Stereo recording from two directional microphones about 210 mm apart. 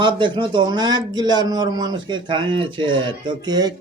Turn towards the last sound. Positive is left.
turn(degrees=-20)  # may be behind; listen again after turning